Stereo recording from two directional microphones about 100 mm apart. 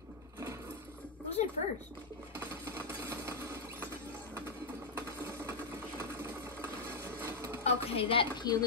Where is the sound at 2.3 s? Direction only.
25° right (ahead or behind).